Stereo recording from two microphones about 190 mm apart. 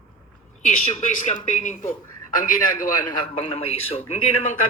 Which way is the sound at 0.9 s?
40° left (ahead or behind).